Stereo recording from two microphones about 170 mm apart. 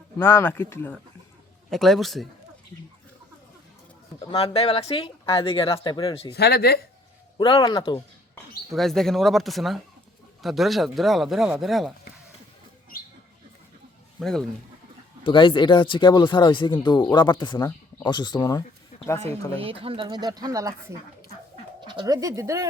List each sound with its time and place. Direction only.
0.2 s speech: 15° left (ahead or behind)
1.7 s speech: centre (ahead or behind)
4.3 s speech: 35° left (ahead or behind)
6.3 s speech: 70° left (ahead or behind)
7.3 s speech: 30° left (ahead or behind)
8.7 s speech: centre (ahead or behind)
14.2 s speech: 5° left (ahead or behind)
15.2 s speech: 30° left (ahead or behind)
19.5 s speech: 35° right (ahead or behind)
21.8 s speech: 25° right (ahead or behind)